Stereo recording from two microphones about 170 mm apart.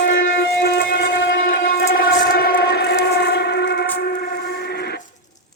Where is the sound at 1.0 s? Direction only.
90° left; by 2.9 s 75° left (ahead or behind).